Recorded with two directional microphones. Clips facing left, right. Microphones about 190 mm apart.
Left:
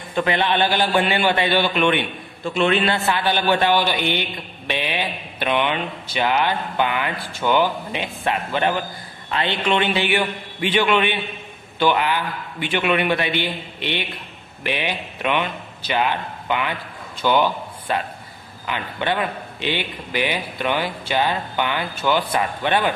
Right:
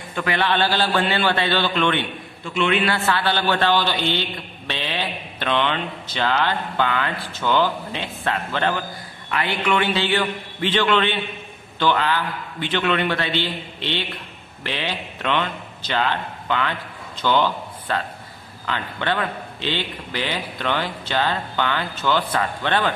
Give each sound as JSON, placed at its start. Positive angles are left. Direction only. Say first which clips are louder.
{"t": 0.1, "sound": "a man's voice", "louder": "left 2 dB", "side_deg": 20}
{"t": 2.5, "sound": "a man's voice", "louder": "left 2 dB", "side_deg": 35}
{"t": 2.8, "sound": "a man's voice", "louder": "left 1 dB", "side_deg": 20}